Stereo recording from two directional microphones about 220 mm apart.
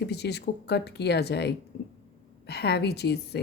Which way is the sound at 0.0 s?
50° left (ahead or behind).